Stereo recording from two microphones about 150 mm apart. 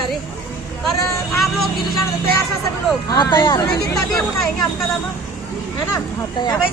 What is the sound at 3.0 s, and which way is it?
Speech, 25° left (ahead or behind).